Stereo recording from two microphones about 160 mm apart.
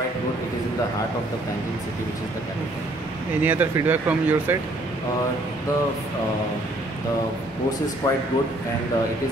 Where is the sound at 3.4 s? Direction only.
10° right (ahead or behind).